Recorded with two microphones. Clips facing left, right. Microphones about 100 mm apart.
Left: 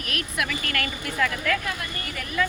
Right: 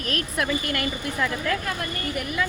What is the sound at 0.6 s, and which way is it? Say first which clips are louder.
Speech: right 2 dB; 20° right (ahead or behind).